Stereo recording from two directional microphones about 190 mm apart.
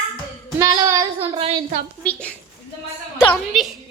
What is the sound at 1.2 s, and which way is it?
Speech, 25° right (ahead or behind).